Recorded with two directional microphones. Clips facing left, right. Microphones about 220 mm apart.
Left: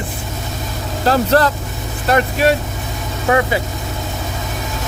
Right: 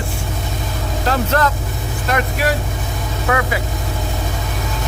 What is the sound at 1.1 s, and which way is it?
Speech, 35° left (ahead or behind).